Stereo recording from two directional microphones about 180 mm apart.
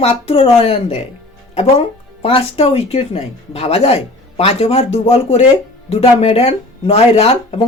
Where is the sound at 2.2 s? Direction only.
30° left (ahead or behind).